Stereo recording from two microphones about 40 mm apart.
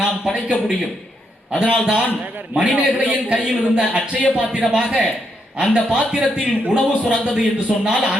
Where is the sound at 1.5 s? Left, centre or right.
Right.